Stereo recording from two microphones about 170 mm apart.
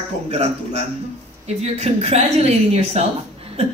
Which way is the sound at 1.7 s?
40° right (ahead or behind).